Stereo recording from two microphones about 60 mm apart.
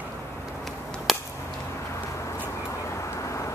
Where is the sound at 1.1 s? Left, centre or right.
Centre.